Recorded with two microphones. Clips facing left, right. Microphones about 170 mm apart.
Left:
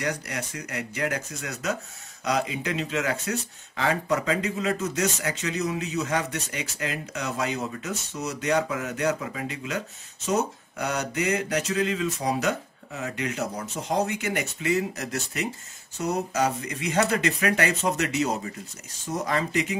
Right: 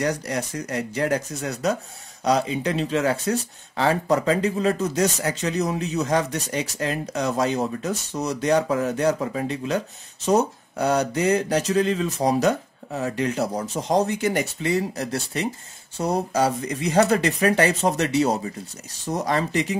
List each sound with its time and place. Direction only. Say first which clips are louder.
0.0 s speech: right 6 dB; 35° right (ahead or behind)